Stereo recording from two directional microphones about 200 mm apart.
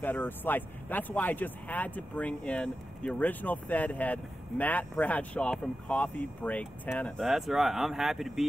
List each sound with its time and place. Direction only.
0.0 s speech: 10° left (ahead or behind)